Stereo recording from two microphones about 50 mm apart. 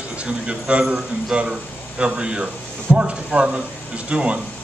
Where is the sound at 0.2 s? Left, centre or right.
Right.